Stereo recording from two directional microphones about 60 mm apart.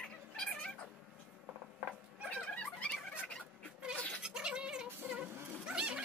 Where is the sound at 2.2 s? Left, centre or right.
Centre.